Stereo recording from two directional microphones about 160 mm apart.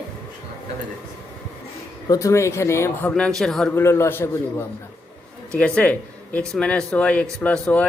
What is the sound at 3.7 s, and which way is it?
Speech, 15° left (ahead or behind).